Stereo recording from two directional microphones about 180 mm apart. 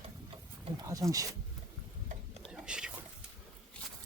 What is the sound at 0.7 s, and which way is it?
Speech, 20° right (ahead or behind).